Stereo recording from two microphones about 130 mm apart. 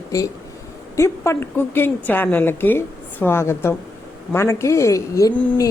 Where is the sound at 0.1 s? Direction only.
25° left (ahead or behind).